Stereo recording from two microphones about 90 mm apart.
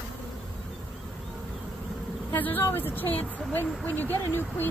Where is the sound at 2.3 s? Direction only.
20° left (ahead or behind).